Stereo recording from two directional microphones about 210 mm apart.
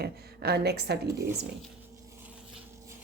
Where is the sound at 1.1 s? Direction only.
15° right (ahead or behind).